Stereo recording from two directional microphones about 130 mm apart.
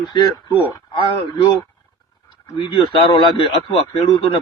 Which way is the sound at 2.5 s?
40° left (ahead or behind).